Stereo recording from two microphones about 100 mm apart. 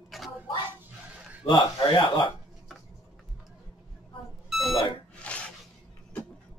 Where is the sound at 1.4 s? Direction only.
50° left (ahead or behind).